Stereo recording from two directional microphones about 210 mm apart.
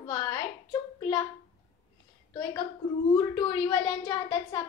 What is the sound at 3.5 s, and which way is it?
A child's voice, 20° left (ahead or behind).